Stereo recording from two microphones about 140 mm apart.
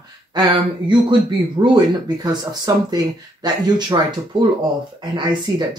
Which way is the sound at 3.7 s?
30° right (ahead or behind).